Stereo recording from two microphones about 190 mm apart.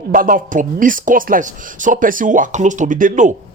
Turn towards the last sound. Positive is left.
turn(degrees=-45)  # may be behind; listen again after turning